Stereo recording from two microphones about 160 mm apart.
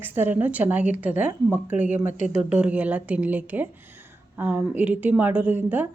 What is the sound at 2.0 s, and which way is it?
Speech, 50° left (ahead or behind).